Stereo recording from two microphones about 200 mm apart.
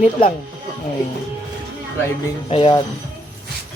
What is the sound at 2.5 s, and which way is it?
Speech, 25° left (ahead or behind).